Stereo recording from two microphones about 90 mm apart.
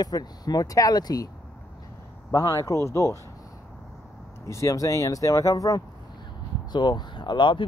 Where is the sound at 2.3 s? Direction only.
40° left (ahead or behind).